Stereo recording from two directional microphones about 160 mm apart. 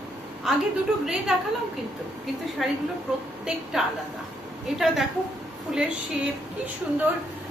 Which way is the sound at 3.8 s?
Centre (ahead or behind).